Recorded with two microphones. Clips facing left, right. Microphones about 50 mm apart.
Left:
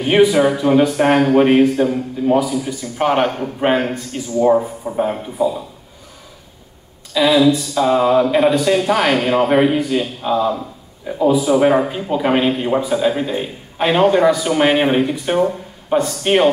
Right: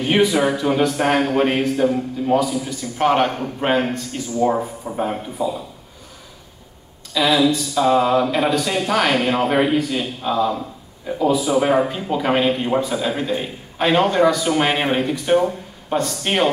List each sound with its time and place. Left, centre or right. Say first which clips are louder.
0.1 s a man's voice: left 5 dB; centre
7.2 s a man's voice: left 4 dB; centre